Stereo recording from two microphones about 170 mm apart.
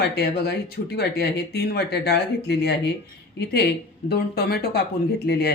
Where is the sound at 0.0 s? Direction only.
70° left (ahead or behind).